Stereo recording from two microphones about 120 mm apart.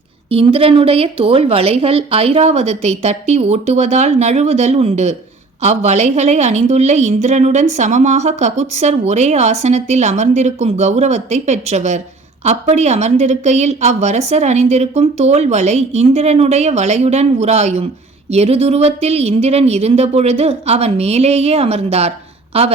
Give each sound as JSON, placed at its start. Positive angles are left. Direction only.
{"t": 0.3, "sound": "a woman's voice", "side_deg": -55}